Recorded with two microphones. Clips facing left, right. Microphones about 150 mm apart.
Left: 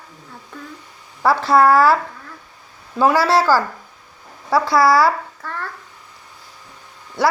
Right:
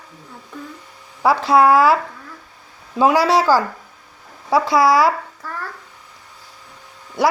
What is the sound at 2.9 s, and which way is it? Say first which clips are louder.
Speech: right 1 dB; 15° right (ahead or behind).